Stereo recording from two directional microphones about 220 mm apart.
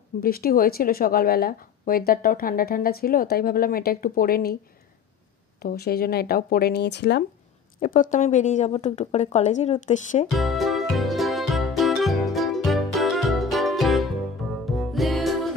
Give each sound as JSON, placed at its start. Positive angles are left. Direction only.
{"t": 0.2, "sound": "speech", "side_deg": 45}
{"t": 5.6, "sound": "speech", "side_deg": 45}
{"t": 7.8, "sound": "speech", "side_deg": 35}
{"t": 10.3, "sound": "music", "side_deg": 0}